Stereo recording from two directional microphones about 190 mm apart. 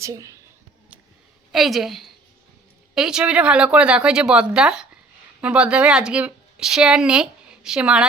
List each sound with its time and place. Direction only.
0.0 s a woman's voice: 15° right (ahead or behind)
1.5 s a woman's voice: centre (ahead or behind)